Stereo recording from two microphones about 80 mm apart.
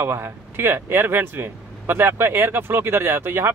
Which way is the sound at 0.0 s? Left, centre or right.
Right.